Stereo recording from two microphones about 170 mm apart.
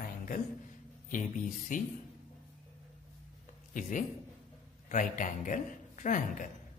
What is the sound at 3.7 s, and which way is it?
A man's voice, 50° left (ahead or behind).